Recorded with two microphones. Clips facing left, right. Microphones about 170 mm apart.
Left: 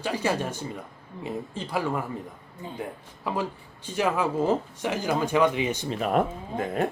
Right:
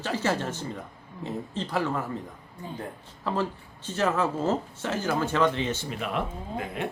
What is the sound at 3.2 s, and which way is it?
A man's voice, 10° left (ahead or behind).